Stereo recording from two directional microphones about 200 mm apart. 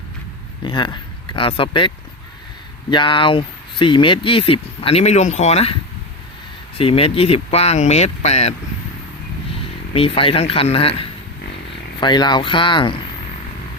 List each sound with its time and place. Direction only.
0.6 s speech: 25° left (ahead or behind)
2.9 s speech: 25° left (ahead or behind)
6.7 s speech: 30° left (ahead or behind)
9.9 s speech: 30° left (ahead or behind)